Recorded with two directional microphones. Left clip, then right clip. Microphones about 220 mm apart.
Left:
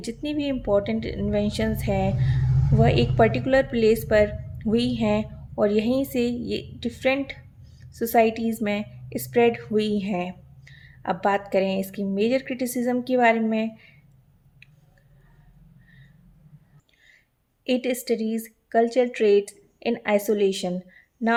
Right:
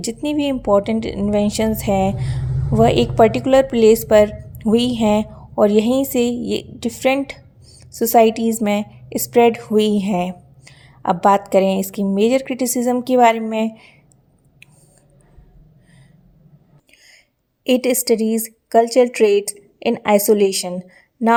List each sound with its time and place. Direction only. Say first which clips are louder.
0.0 s speech: right 8 dB; 35° right (ahead or behind)
17.6 s speech: right 8 dB; 40° right (ahead or behind)